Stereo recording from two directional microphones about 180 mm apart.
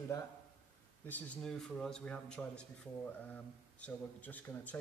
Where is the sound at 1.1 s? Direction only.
5° left (ahead or behind).